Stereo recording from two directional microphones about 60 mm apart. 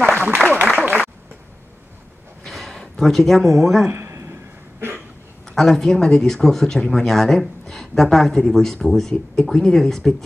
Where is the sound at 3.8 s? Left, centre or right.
Right.